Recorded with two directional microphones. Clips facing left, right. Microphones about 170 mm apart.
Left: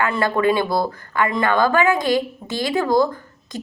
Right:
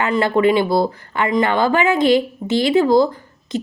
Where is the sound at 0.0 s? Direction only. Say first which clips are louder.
Right 3 dB; 20° right (ahead or behind).